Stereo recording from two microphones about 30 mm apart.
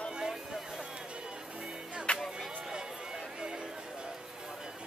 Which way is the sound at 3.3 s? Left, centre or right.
Right.